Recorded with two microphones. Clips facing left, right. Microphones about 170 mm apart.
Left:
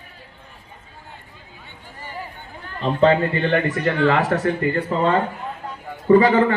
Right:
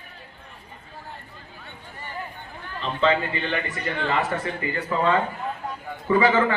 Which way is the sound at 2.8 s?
45° left (ahead or behind).